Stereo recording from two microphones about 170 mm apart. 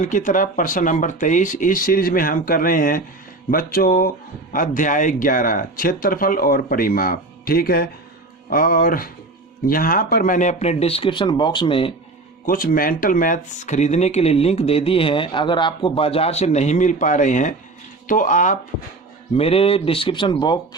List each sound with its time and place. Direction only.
0.0 s speech: 50° left (ahead or behind); by 11.9 s 30° left (ahead or behind)
12.5 s speech: 60° left (ahead or behind)
19.3 s speech: 35° left (ahead or behind)